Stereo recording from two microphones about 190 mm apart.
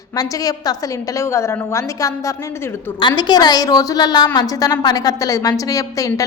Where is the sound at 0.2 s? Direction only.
20° left (ahead or behind).